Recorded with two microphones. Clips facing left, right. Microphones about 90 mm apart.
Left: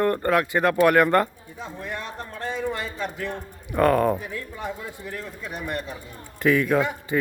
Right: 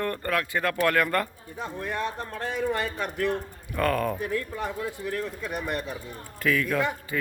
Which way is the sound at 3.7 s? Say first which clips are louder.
Left 6 dB; 25° left (ahead or behind).